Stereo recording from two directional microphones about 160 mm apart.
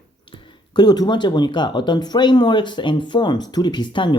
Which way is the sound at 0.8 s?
25° left (ahead or behind).